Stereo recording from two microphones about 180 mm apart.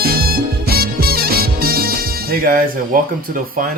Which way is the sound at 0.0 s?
55° right (ahead or behind).